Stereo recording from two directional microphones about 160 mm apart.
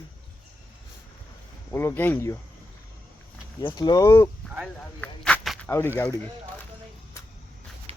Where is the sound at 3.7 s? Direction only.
25° left (ahead or behind).